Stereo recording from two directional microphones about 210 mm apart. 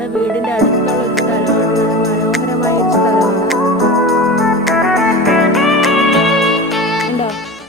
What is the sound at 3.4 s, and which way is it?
Organ, centre (ahead or behind).